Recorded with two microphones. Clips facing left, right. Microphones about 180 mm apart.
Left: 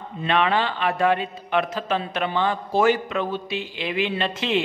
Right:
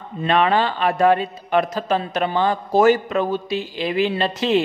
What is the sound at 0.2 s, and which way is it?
A man's voice, 40° right (ahead or behind).